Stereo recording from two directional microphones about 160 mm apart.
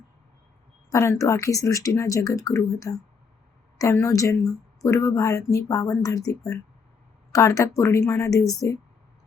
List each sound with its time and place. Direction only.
0.9 s speech: 20° left (ahead or behind)